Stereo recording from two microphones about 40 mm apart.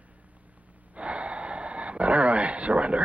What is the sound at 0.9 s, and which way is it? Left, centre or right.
Gasp, right.